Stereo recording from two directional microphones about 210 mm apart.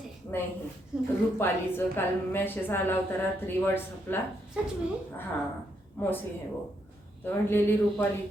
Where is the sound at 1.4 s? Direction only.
10° left (ahead or behind).